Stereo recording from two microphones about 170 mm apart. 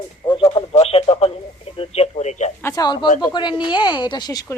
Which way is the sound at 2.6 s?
20° left (ahead or behind).